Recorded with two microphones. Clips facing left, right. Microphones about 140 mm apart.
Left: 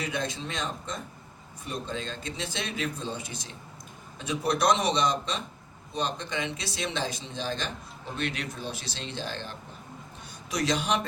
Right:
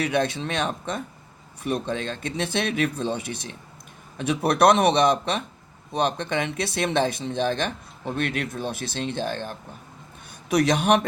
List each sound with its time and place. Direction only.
0.0 s speech: 65° right (ahead or behind)